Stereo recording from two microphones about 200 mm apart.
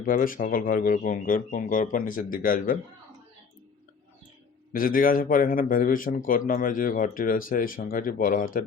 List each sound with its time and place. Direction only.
0.0 s a man's voice: 45° left (ahead or behind)
4.7 s a man's voice: 45° left (ahead or behind)